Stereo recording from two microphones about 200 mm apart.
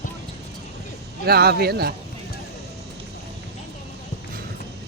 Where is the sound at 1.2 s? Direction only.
50° right (ahead or behind).